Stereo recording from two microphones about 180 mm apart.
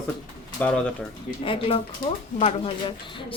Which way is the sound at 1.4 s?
30° left (ahead or behind).